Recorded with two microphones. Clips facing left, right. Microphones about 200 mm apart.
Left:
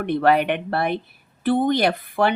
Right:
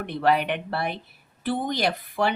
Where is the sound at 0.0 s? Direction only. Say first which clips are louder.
Left 5 dB; 55° left (ahead or behind).